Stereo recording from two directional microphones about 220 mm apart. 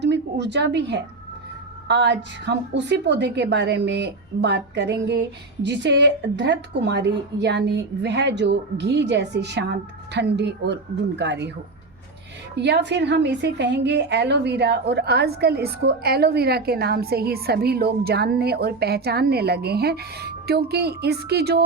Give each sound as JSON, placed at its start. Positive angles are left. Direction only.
{"t": 0.0, "sound": "a woman's voice", "side_deg": -50}
{"t": 12.5, "sound": "a woman's voice", "side_deg": -50}